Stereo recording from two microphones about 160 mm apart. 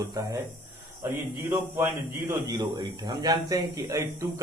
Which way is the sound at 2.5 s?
25° right (ahead or behind).